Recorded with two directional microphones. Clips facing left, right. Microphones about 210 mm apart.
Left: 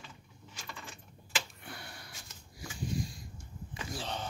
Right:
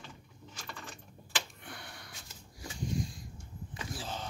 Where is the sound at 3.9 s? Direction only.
Centre (ahead or behind).